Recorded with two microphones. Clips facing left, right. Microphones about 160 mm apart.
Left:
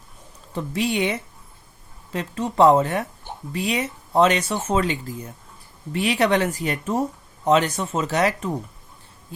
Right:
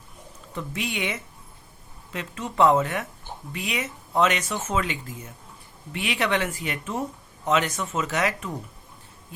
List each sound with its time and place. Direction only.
0.5 s speech: 35° left (ahead or behind)